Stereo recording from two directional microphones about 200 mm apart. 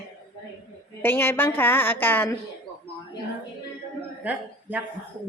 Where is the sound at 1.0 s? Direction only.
10° left (ahead or behind).